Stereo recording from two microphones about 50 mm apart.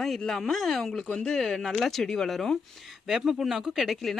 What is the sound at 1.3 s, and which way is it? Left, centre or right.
Speech, centre.